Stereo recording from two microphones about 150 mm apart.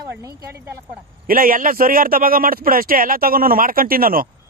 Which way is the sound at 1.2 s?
70° right (ahead or behind).